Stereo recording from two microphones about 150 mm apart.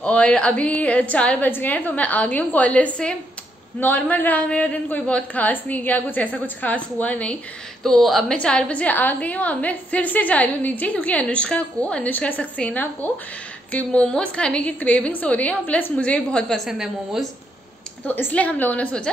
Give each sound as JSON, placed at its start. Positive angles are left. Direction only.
{"t": 0.0, "sound": "a woman's voice", "side_deg": 10}
{"t": 18.0, "sound": "a woman's voice", "side_deg": 10}